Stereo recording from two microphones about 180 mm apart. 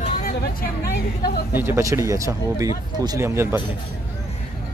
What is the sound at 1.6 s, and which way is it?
Speech, 15° right (ahead or behind).